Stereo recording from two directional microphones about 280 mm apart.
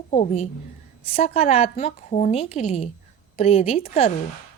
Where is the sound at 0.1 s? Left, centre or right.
Left.